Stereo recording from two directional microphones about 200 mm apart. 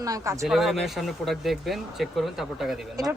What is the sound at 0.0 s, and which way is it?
Speech, 15° right (ahead or behind).